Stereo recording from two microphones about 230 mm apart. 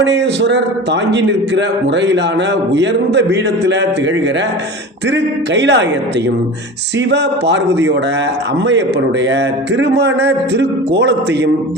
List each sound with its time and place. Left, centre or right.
0.0 s a man's voice: right
5.1 s a man's voice: right
7.1 s a man's voice: right
9.2 s a man's voice: right